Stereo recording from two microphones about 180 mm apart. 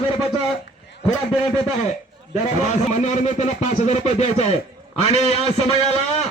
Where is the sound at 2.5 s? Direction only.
40° left (ahead or behind).